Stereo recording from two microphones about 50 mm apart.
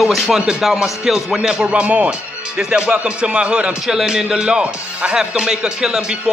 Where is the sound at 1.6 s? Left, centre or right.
Right.